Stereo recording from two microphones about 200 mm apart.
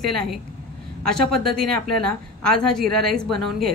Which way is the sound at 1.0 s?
50° right (ahead or behind).